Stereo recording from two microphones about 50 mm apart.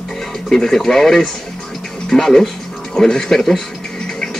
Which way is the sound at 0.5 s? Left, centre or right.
Centre.